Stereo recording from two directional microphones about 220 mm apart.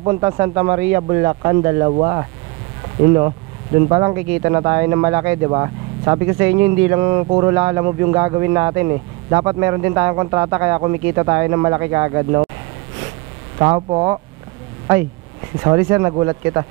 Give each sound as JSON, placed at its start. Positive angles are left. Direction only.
{"t": 0.0, "sound": "speech", "side_deg": -20}
{"t": 13.6, "sound": "speech", "side_deg": -20}
{"t": 15.6, "sound": "speech", "side_deg": -15}